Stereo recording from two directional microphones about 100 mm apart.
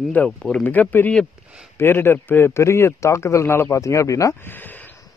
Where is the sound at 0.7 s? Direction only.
15° left (ahead or behind); by 4.4 s 35° left (ahead or behind).